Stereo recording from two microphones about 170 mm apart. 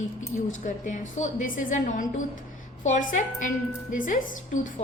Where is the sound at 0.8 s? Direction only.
50° left (ahead or behind).